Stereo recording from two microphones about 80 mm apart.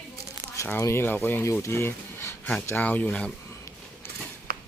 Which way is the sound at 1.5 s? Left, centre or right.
Left.